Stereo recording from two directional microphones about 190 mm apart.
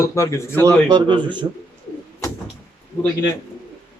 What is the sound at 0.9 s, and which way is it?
Speech, 25° right (ahead or behind).